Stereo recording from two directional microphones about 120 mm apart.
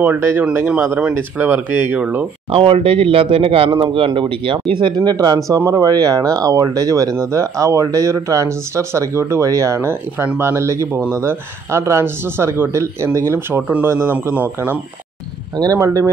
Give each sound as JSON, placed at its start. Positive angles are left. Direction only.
{"t": 0.0, "sound": "speech", "side_deg": -15}
{"t": 2.5, "sound": "speech", "side_deg": -50}
{"t": 15.5, "sound": "speech", "side_deg": -30}